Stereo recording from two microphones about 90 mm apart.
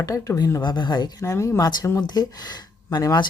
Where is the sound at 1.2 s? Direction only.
35° left (ahead or behind).